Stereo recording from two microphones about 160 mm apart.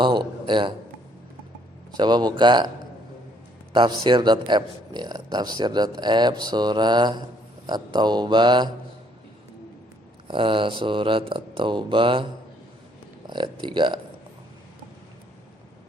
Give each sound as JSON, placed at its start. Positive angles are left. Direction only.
{"t": 0.0, "sound": "speech", "side_deg": -30}
{"t": 2.0, "sound": "speech", "side_deg": -25}
{"t": 3.7, "sound": "speech", "side_deg": -30}
{"t": 10.2, "sound": "speech", "side_deg": -35}
{"t": 13.2, "sound": "speech", "side_deg": -30}